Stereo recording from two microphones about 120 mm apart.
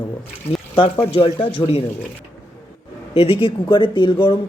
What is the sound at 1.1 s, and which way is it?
Speech, 50° left (ahead or behind).